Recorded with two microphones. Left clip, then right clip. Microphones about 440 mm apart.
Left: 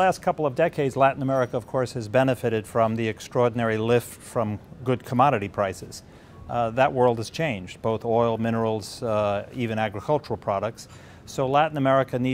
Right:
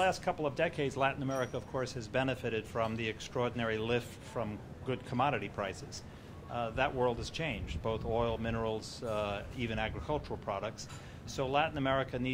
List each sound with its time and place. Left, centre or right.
0.0 s speech: left